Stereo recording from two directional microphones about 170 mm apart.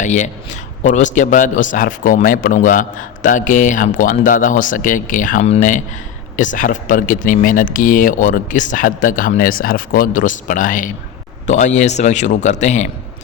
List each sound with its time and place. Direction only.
0.0 s speech: 45° left (ahead or behind)